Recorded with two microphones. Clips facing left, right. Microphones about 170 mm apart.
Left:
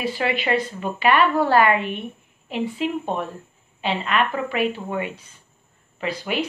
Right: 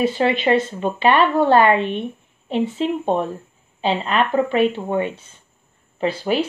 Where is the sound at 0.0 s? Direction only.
25° right (ahead or behind).